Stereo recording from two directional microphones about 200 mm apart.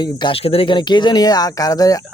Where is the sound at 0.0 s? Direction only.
25° left (ahead or behind).